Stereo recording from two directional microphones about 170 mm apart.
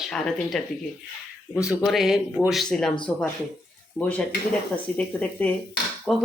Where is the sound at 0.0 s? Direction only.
Centre (ahead or behind).